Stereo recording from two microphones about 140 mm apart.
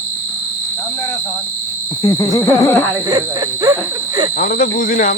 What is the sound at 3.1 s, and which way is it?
Speech, 30° right (ahead or behind).